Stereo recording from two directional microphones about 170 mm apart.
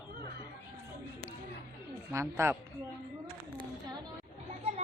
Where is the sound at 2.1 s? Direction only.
15° right (ahead or behind).